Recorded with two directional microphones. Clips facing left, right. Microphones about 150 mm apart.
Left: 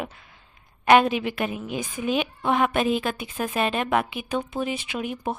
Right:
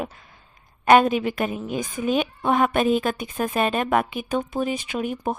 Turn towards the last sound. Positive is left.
turn(degrees=-45)  # may be behind; listen again after turning